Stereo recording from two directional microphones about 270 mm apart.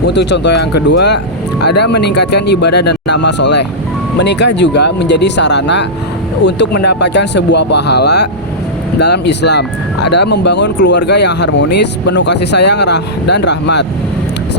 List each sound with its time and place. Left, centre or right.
0.1 s speech: left